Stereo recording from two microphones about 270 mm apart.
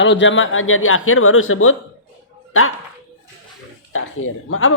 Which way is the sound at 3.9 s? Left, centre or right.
Left.